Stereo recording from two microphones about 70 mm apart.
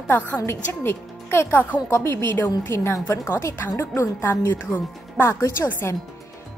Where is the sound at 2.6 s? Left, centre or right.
Left.